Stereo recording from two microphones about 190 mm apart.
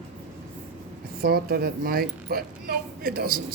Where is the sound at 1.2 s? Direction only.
55° right (ahead or behind).